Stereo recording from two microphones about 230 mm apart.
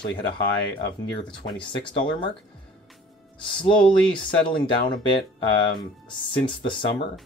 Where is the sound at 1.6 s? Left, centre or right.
Left.